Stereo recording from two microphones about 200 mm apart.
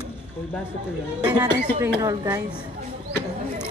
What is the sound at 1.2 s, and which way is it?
A woman's voice, 20° right (ahead or behind).